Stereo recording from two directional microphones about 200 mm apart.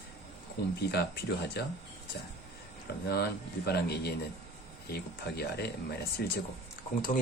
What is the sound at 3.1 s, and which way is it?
Speech, 50° left (ahead or behind).